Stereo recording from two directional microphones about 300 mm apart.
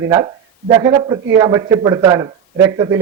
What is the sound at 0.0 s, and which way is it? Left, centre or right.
A man's voice, centre.